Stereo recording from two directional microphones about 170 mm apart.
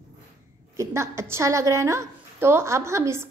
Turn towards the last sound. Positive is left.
turn(degrees=-15)  # may be behind; listen again after turning